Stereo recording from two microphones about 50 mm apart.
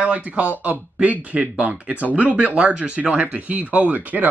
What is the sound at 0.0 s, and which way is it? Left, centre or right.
Speech, right.